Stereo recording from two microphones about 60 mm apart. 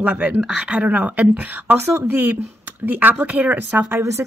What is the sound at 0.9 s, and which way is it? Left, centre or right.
Speech, right.